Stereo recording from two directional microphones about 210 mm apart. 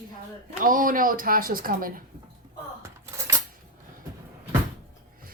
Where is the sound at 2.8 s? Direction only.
15° right (ahead or behind).